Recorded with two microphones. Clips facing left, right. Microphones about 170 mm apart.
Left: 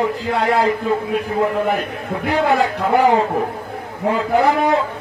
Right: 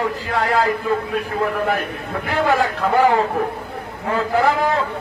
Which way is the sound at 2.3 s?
20° left (ahead or behind).